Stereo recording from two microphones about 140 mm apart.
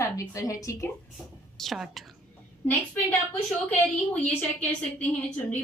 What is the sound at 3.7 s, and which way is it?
A woman's voice, 10° left (ahead or behind).